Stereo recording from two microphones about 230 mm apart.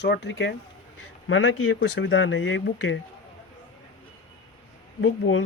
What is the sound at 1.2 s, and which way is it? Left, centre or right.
Speech, left.